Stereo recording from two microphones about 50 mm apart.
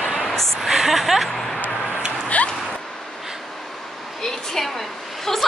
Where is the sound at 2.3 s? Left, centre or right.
Left.